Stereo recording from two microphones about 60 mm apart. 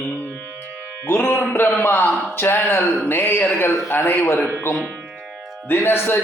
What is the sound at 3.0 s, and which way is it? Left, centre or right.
Music, left.